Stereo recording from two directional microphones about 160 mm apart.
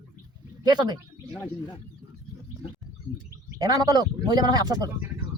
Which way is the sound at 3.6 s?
25° right (ahead or behind).